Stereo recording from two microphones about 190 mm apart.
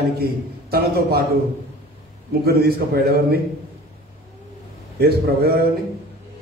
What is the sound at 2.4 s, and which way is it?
Speech, 55° right (ahead or behind).